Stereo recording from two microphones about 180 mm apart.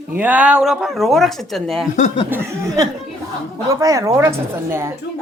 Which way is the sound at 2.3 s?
15° right (ahead or behind).